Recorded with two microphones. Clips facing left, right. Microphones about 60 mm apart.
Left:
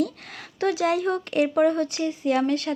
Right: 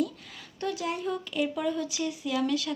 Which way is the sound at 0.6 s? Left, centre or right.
Left.